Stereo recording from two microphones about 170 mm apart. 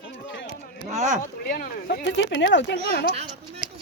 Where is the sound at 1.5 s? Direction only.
60° left (ahead or behind); by 3.0 s 90° left.